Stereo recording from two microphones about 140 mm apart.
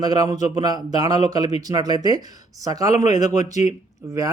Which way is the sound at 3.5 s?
60° left (ahead or behind).